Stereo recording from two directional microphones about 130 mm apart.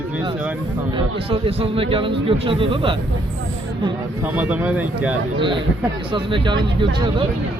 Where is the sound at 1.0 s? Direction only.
45° right (ahead or behind).